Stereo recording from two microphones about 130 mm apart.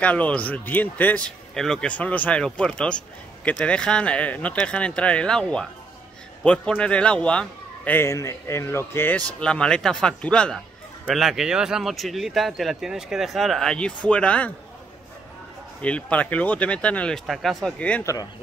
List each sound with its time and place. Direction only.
0.0 s a man's voice: 10° left (ahead or behind)
15.8 s a man's voice: 10° left (ahead or behind)
18.0 s speech: 30° left (ahead or behind)